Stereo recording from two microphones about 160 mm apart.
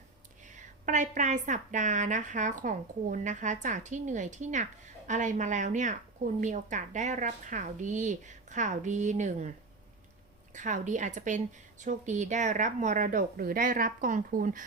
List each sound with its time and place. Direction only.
0.4 s a woman's voice: 50° right (ahead or behind)
10.5 s a woman's voice: 50° right (ahead or behind)